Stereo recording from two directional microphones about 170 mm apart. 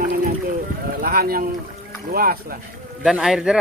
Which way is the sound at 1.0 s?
60° right (ahead or behind).